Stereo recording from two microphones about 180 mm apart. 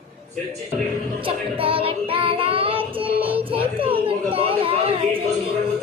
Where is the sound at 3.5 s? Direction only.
30° right (ahead or behind).